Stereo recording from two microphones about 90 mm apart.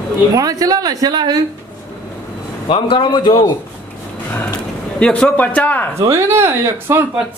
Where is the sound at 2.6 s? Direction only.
65° left (ahead or behind).